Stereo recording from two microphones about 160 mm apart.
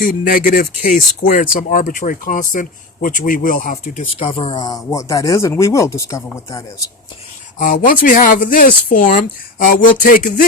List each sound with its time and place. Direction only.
0.0 s speech: 60° left (ahead or behind)
4.2 s speech: 35° left (ahead or behind)
4.6 s speech: 20° left (ahead or behind)
7.6 s speech: 60° left (ahead or behind)